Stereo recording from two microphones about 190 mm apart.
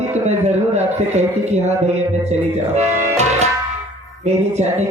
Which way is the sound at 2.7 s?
35° right (ahead or behind).